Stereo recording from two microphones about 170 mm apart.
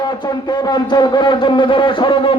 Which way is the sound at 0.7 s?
25° left (ahead or behind).